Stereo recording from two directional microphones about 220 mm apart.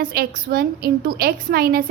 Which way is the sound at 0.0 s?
40° right (ahead or behind).